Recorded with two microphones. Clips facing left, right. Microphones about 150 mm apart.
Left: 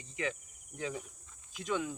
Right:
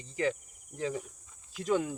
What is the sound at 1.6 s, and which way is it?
Speech, 40° right (ahead or behind).